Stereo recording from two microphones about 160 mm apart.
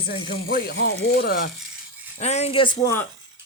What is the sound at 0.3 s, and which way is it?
Speech, 90° left.